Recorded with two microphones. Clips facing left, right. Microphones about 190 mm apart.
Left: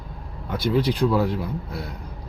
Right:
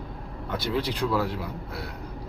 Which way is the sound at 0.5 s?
15° left (ahead or behind).